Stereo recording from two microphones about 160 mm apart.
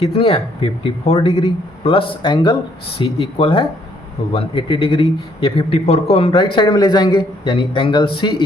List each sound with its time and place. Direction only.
0.0 s a man's voice: 35° left (ahead or behind)